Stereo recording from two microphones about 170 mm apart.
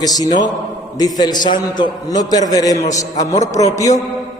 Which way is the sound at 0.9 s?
25° left (ahead or behind).